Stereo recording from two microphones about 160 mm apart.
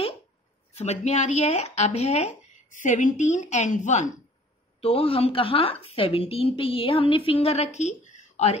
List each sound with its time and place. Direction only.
0.7 s speech: 45° left (ahead or behind)
4.7 s a woman's voice: 35° left (ahead or behind)